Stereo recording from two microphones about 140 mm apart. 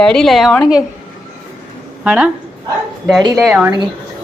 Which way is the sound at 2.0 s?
10° right (ahead or behind).